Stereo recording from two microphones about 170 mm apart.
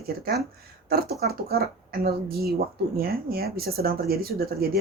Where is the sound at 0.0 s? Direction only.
65° right (ahead or behind).